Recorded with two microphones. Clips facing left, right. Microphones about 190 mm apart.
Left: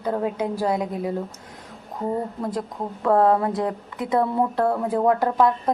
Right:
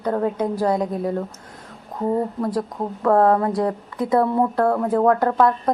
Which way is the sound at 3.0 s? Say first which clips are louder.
Right 2 dB; 20° left (ahead or behind).